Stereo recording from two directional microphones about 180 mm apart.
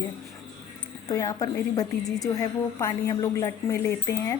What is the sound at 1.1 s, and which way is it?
A woman's voice, 20° left (ahead or behind).